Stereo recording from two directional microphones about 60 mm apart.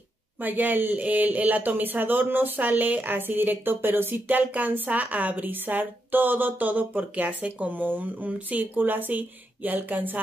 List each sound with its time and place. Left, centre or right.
0.4 s speech: right